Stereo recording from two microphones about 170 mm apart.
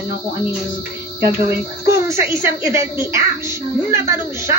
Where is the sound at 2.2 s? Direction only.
15° right (ahead or behind).